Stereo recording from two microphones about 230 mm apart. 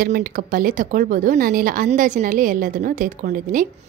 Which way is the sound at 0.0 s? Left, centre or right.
Right.